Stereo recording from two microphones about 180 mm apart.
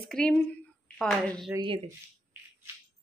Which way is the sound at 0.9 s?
5° left (ahead or behind).